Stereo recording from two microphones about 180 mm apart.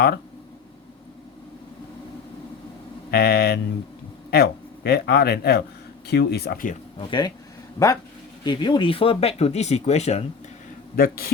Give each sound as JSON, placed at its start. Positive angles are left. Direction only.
{"t": 3.1, "sound": "speech", "side_deg": 60}
{"t": 7.1, "sound": "speech", "side_deg": 25}
{"t": 8.4, "sound": "speech", "side_deg": 25}
{"t": 10.9, "sound": "speech", "side_deg": 55}